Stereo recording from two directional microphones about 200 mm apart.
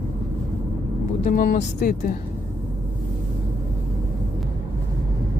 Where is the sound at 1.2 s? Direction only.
40° left (ahead or behind).